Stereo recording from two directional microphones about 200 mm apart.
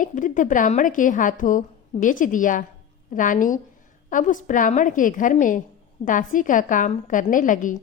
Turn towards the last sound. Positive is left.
turn(degrees=40)  # may be behind; listen again after turning